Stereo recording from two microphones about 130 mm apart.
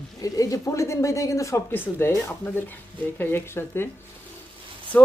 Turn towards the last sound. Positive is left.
turn(degrees=10)  # may be behind; listen again after turning